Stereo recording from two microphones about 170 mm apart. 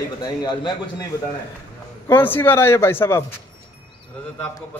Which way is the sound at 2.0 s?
10° left (ahead or behind).